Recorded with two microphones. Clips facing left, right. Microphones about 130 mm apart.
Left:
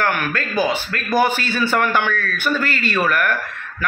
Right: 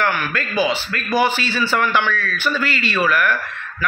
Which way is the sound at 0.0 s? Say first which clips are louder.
Even; 50° left (ahead or behind).